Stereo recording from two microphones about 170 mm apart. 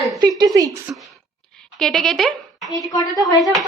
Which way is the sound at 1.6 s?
Centre (ahead or behind).